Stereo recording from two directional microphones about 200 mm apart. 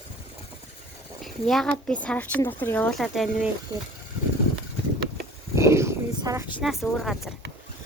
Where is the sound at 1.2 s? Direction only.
Centre (ahead or behind).